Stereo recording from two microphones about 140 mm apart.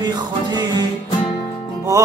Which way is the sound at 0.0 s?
30° right (ahead or behind).